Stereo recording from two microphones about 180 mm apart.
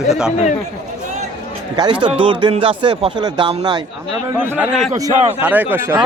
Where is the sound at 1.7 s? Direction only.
25° right (ahead or behind).